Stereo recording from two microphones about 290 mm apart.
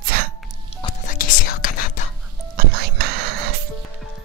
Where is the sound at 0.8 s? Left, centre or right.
Left.